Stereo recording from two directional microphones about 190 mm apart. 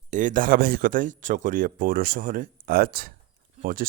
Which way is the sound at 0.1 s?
40° right (ahead or behind).